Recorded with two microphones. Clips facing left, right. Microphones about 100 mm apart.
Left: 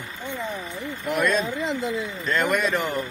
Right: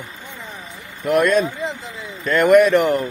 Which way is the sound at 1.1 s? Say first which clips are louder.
Right 7 dB; 60° right (ahead or behind).